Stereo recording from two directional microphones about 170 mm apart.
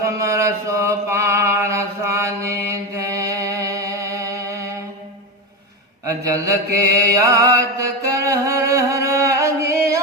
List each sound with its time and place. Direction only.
0.0 s mantra: 20° right (ahead or behind)
2.5 s music: 15° right (ahead or behind)
6.1 s mantra: 20° right (ahead or behind)